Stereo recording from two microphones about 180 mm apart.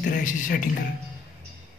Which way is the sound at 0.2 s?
45° left (ahead or behind).